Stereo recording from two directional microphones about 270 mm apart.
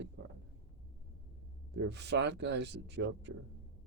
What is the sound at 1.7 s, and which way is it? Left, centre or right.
Speech, right.